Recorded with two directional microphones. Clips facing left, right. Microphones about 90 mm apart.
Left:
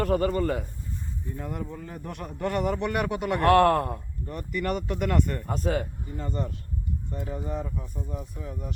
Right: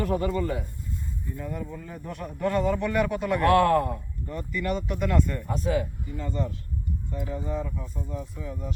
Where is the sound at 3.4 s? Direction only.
55° left (ahead or behind).